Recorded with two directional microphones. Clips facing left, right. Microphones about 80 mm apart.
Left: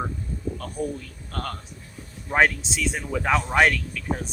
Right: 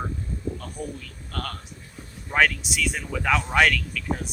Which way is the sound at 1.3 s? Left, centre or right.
Left.